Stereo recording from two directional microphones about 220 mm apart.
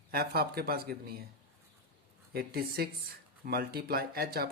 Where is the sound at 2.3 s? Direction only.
45° right (ahead or behind).